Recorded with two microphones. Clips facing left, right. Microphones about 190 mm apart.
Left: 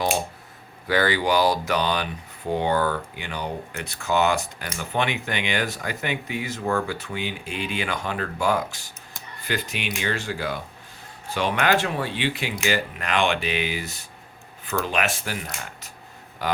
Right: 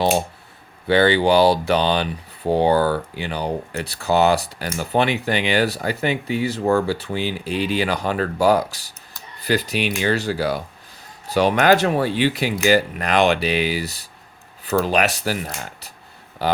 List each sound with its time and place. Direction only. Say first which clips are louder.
0.9 s speech: right 6 dB; 30° right (ahead or behind)